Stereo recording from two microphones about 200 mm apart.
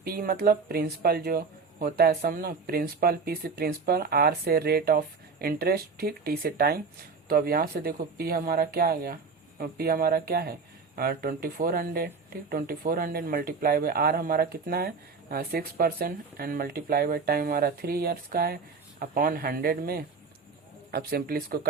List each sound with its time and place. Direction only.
0.0 s speech: 50° right (ahead or behind)